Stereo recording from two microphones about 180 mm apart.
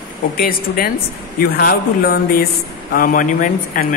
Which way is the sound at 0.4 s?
55° left (ahead or behind).